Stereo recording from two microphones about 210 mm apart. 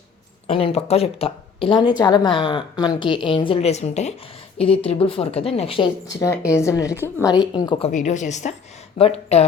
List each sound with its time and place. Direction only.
0.4 s a woman's voice: 30° left (ahead or behind)
6.1 s a woman's voice: 15° left (ahead or behind)
7.9 s a woman's voice: 35° left (ahead or behind)